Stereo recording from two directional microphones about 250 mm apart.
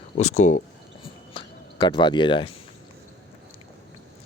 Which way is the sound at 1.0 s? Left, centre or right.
Centre.